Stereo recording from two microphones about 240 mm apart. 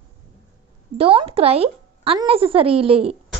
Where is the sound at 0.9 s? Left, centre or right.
Right.